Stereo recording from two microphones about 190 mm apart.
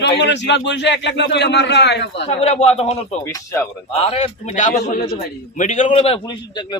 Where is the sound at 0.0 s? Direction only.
65° left (ahead or behind).